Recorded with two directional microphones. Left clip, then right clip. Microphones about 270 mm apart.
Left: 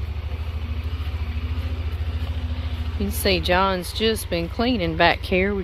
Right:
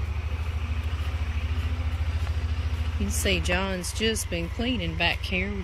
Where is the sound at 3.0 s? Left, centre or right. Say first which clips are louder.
Left 5 dB; centre.